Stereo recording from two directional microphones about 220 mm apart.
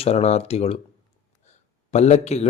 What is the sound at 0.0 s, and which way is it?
Speech, 30° left (ahead or behind).